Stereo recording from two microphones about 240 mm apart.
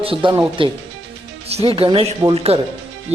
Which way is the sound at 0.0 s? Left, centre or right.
Right.